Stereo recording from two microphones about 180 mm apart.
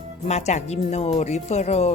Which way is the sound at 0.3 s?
40° left (ahead or behind).